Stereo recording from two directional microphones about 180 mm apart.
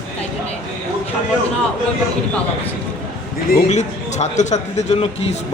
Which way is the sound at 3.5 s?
40° left (ahead or behind).